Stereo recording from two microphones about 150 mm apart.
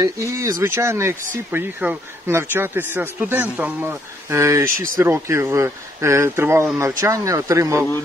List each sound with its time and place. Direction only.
0.0 s speech: 20° right (ahead or behind)